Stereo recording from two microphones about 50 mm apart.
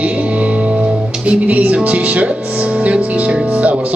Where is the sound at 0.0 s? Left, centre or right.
Right.